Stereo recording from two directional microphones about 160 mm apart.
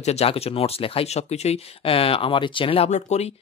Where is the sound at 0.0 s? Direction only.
40° left (ahead or behind).